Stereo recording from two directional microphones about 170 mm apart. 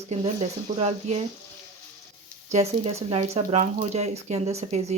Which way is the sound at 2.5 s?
40° right (ahead or behind).